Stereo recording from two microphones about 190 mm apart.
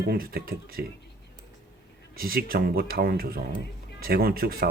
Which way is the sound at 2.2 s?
50° right (ahead or behind).